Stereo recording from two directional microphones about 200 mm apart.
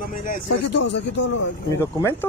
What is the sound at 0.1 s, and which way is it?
Speech, 40° left (ahead or behind).